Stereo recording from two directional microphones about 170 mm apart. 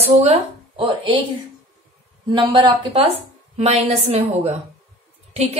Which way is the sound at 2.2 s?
30° right (ahead or behind).